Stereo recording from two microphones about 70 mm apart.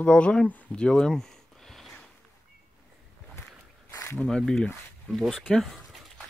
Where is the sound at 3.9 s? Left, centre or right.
Left.